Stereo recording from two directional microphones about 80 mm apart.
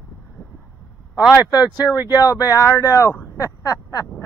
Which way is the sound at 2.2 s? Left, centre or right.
Left.